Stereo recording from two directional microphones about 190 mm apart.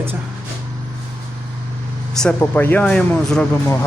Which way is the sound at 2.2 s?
10° left (ahead or behind).